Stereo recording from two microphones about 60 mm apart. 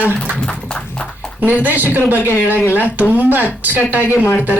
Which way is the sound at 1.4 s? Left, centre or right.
Right.